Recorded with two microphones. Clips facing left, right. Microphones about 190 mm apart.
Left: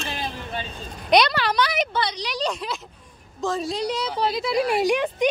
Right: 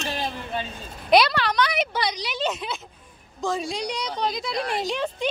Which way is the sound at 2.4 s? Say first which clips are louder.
Right 1 dB; 5° right (ahead or behind).